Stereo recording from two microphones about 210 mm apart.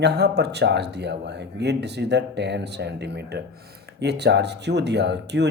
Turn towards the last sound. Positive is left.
turn(degrees=-55)  # may be behind; listen again after turning